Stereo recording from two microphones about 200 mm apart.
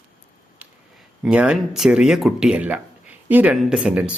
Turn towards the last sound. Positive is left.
turn(degrees=-5)  # may be behind; listen again after turning